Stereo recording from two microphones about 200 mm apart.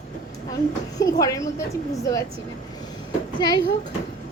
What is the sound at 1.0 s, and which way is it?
A woman's voice, 20° left (ahead or behind).